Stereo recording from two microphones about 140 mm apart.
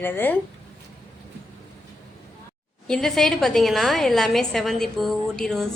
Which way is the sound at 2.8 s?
5° left (ahead or behind).